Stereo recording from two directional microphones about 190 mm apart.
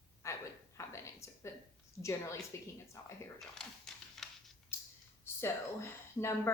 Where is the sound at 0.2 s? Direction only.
15° left (ahead or behind).